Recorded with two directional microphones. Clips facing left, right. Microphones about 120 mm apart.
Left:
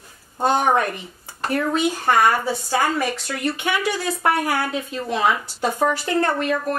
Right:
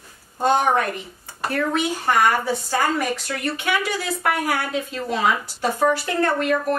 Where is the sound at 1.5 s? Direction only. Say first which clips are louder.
Left 2 dB; 15° left (ahead or behind).